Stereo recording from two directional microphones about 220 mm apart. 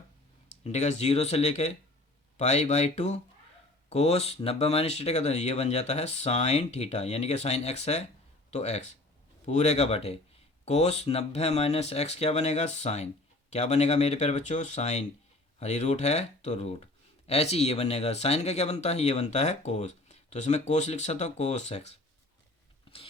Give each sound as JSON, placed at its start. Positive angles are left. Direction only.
{"t": 0.6, "sound": "speech", "side_deg": 30}
{"t": 22.9, "sound": "biting", "side_deg": 25}